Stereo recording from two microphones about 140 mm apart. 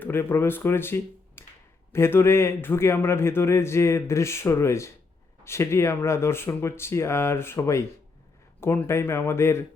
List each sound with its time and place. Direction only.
0.0 s a man's voice: 15° left (ahead or behind)